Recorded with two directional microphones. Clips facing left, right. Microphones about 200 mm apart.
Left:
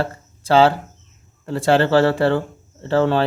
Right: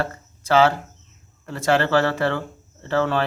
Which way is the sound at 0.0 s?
30° left (ahead or behind).